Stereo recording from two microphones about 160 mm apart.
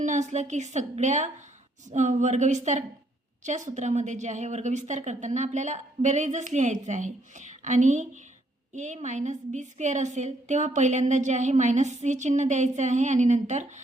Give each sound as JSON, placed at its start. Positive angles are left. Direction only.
{"t": 0.0, "sound": "a woman's voice", "side_deg": -50}